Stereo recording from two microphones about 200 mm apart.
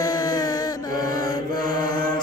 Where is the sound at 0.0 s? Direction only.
20° left (ahead or behind).